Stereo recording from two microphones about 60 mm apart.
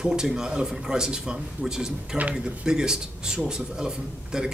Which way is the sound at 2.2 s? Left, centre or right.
Right.